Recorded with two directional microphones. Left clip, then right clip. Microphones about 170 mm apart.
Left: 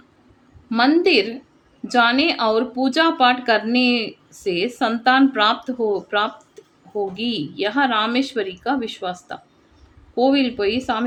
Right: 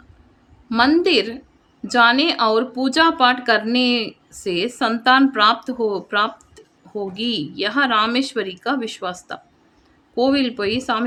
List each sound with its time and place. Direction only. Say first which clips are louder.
0.7 s speech: even; 15° right (ahead or behind)